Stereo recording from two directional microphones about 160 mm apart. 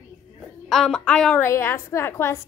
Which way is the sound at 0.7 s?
Centre (ahead or behind).